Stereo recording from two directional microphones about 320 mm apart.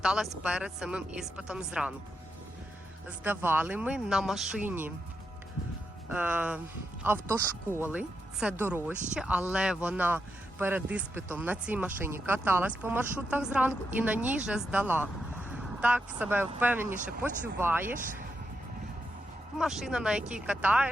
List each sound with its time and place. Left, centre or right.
0.0 s speech: centre
3.2 s speech: centre
6.1 s speech: centre
7.7 s speech: centre
17.9 s speech: right
19.5 s speech: centre